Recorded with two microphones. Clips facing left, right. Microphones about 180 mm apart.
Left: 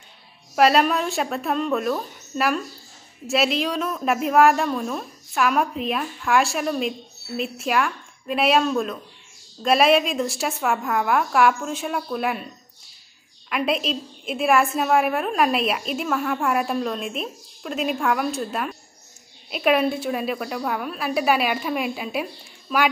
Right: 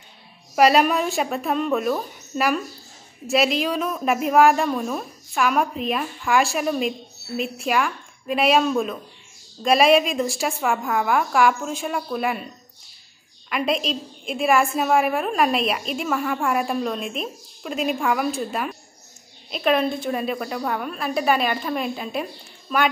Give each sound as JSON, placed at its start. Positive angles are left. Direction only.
{"t": 0.6, "sound": "a woman's voice", "side_deg": 0}
{"t": 13.5, "sound": "a woman's voice", "side_deg": 0}